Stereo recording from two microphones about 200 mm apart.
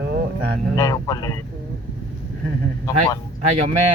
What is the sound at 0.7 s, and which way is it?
Speech, 15° left (ahead or behind).